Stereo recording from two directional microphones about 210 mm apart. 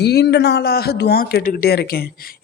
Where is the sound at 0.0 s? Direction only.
50° left (ahead or behind).